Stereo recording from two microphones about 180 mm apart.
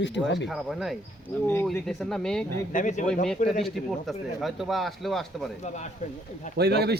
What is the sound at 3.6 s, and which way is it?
Speech, centre (ahead or behind).